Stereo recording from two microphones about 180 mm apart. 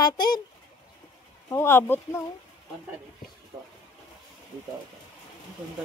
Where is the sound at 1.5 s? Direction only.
15° left (ahead or behind).